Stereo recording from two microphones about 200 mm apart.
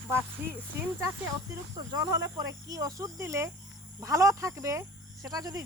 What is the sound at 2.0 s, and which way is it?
Speech, 15° right (ahead or behind).